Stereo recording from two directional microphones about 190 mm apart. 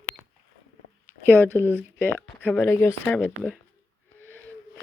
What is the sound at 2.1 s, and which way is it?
Speech, 10° left (ahead or behind).